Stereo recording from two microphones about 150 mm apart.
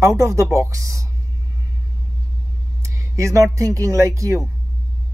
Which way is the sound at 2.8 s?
20° right (ahead or behind).